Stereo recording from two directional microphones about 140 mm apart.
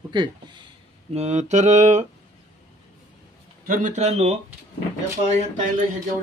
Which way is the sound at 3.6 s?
75° right (ahead or behind).